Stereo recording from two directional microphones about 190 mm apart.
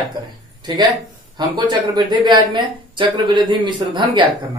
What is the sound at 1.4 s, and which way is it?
Speech, 20° right (ahead or behind).